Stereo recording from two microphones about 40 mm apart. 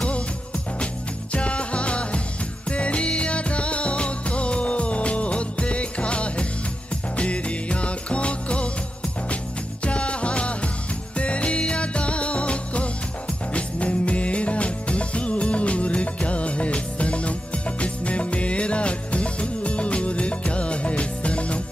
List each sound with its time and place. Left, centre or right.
1.3 s music: left
9.8 s music: left